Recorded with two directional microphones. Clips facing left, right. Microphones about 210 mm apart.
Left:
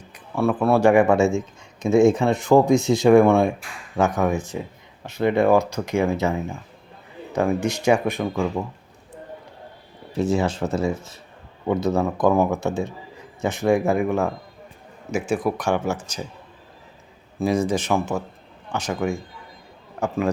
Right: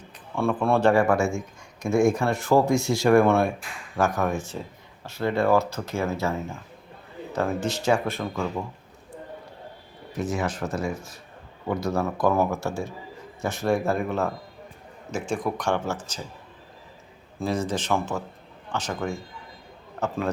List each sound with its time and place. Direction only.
0.3 s speech: 5° left (ahead or behind)
10.1 s speech: 30° left (ahead or behind); by 16.2 s 10° left (ahead or behind)
17.4 s speech: 10° left (ahead or behind)